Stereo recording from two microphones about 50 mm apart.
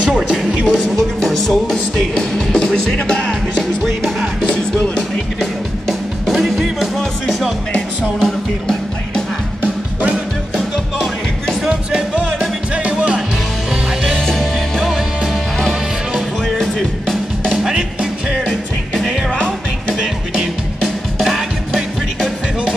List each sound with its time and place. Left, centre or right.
0.7 s music: centre
4.5 s music: centre
5.4 s music: centre
7.7 s music: centre
11.7 s music: centre
14.1 s music: centre
16.4 s music: centre
21.2 s music: centre